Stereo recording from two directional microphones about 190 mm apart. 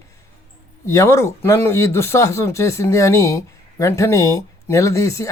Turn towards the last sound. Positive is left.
turn(degrees=15)  # may be behind; listen again after turning